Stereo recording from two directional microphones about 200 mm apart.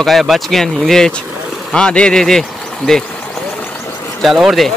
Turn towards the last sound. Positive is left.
turn(degrees=0)  # may be behind; listen again after turning